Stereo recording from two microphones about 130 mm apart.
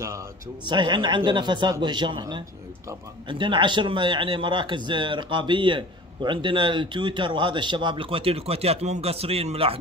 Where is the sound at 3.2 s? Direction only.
40° right (ahead or behind).